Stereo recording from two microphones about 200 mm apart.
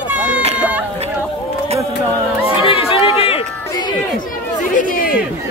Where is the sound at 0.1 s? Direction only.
5° right (ahead or behind).